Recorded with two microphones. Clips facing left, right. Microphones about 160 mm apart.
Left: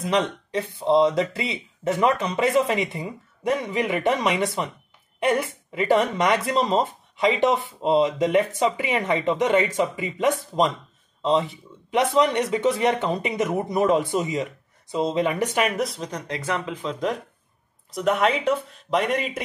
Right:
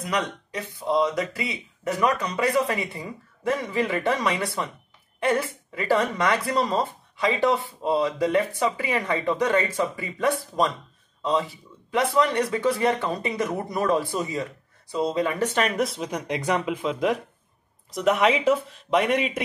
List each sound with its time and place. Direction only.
0.0 s speech: 25° left (ahead or behind); by 15.7 s 10° left (ahead or behind)
15.8 s speech: 5° right (ahead or behind)